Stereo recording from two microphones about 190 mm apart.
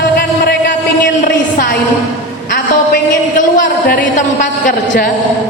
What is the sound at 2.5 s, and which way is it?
A woman's voice, 45° left (ahead or behind).